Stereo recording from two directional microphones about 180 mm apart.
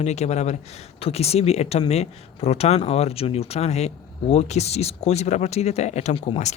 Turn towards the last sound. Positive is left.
turn(degrees=40)  # may be behind; listen again after turning